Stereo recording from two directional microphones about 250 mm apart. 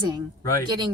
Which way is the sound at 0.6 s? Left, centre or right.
Centre.